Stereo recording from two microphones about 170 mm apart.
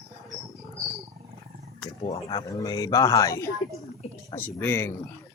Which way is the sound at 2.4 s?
20° left (ahead or behind).